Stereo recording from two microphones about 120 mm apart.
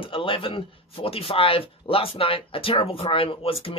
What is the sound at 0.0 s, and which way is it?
Speech, 45° left (ahead or behind).